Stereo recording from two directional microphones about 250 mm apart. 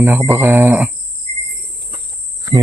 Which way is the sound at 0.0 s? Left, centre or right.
Centre.